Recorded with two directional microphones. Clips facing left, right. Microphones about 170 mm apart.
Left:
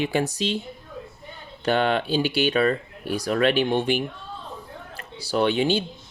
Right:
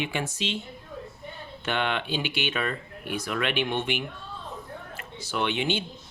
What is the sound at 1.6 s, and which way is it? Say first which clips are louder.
Speech: left 7 dB; 35° left (ahead or behind).